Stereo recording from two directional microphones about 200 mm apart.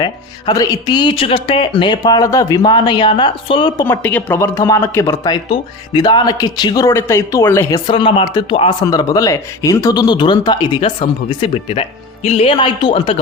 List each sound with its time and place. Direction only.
0.0 s speech: 20° left (ahead or behind)
7.9 s speech: 25° left (ahead or behind)